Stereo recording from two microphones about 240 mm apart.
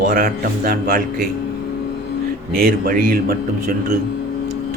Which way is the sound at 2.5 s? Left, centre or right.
Right.